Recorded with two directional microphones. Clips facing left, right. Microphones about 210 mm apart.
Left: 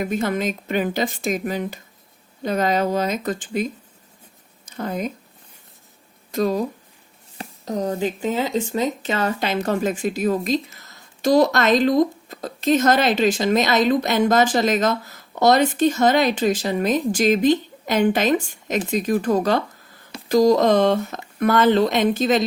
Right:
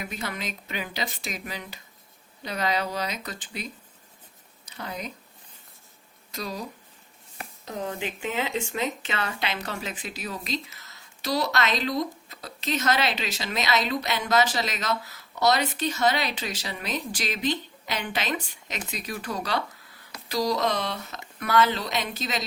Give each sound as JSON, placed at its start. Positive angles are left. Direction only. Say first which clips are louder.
{"t": 0.0, "sound": "speech", "louder": "left 12 dB", "side_deg": 50}
{"t": 6.3, "sound": "speech", "louder": "left 13 dB", "side_deg": 50}